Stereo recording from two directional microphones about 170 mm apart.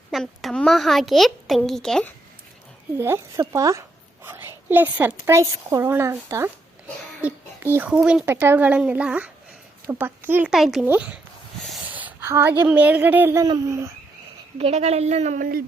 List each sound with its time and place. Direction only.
0.1 s a child's voice: centre (ahead or behind)
3.0 s speech: 15° right (ahead or behind)
3.5 s a sound: 20° right (ahead or behind)
5.2 s a woman's voice: 15° right (ahead or behind)
14.6 s speech: 40° right (ahead or behind)